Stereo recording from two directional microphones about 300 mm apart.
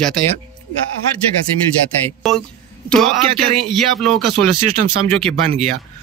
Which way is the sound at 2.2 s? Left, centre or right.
Centre.